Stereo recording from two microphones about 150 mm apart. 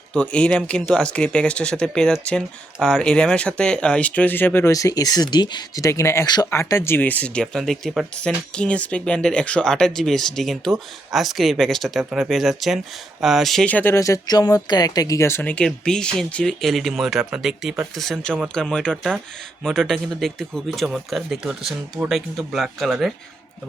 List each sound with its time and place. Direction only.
0.1 s speech: 5° left (ahead or behind)